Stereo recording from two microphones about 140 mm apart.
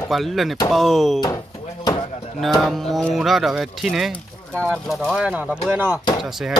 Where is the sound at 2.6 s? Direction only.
Centre (ahead or behind).